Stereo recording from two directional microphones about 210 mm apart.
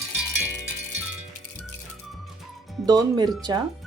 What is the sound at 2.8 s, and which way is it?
Speech, 20° right (ahead or behind).